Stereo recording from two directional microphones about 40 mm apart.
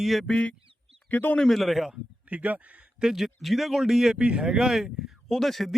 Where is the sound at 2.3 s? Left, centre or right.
Right.